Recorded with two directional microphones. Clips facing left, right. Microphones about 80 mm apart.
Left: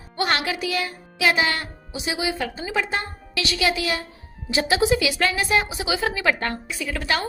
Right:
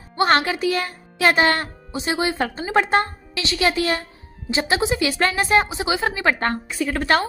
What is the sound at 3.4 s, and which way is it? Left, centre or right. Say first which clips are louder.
Speech: right 2 dB; right.